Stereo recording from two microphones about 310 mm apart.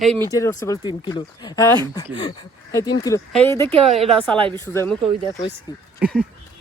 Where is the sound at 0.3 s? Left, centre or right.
Centre.